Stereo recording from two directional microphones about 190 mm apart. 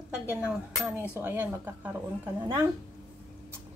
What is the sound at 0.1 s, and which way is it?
Speech, 5° right (ahead or behind).